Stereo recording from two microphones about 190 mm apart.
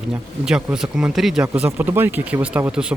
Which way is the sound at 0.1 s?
5° right (ahead or behind).